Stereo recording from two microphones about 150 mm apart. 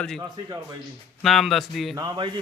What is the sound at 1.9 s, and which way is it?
Speech, 30° right (ahead or behind).